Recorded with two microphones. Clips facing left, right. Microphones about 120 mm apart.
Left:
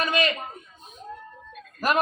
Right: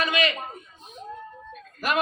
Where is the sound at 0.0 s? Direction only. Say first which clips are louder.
Even; 40° left (ahead or behind).